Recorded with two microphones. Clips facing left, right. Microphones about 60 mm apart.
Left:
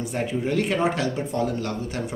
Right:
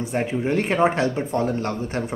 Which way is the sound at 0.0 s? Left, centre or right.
Right.